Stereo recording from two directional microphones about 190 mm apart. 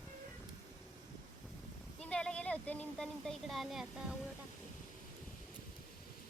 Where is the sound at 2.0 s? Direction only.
5° left (ahead or behind).